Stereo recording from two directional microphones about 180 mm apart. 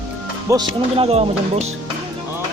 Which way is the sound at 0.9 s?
35° right (ahead or behind).